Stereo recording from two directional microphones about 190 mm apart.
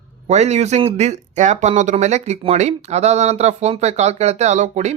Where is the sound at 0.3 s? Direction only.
35° right (ahead or behind).